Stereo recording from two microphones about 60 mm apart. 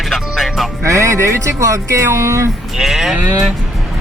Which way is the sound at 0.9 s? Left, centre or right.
Right.